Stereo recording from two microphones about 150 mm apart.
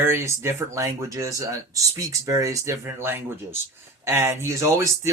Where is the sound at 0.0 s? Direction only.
15° right (ahead or behind).